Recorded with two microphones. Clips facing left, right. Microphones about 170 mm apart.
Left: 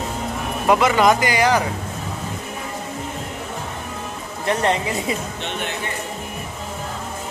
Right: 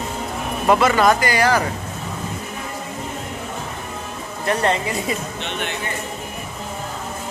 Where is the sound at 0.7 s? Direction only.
15° left (ahead or behind).